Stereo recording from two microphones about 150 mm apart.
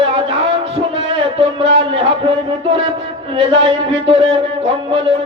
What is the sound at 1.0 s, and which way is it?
Music, 40° right (ahead or behind).